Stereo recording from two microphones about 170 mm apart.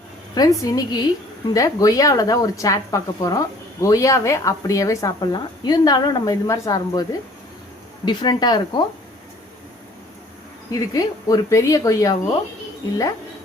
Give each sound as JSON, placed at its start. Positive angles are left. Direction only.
{"t": 0.3, "sound": "a woman's voice", "side_deg": 20}
{"t": 8.0, "sound": "a woman's voice", "side_deg": 25}
{"t": 10.7, "sound": "a woman's voice", "side_deg": 20}